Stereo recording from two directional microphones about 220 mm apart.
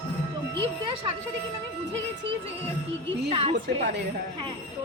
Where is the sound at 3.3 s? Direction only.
25° right (ahead or behind).